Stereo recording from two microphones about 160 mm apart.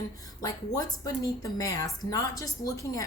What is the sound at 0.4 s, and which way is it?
A woman's voice, 25° left (ahead or behind).